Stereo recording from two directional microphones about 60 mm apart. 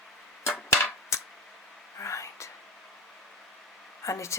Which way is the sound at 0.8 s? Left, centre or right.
Left.